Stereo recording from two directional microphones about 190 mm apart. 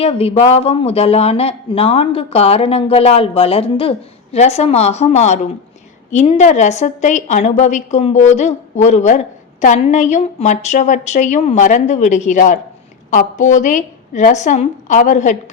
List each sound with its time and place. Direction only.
0.0 s a woman's voice: 30° left (ahead or behind)